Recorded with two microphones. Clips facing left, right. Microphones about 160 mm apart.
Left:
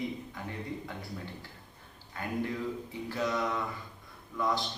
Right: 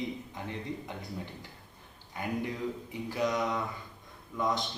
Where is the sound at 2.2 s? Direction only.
15° right (ahead or behind).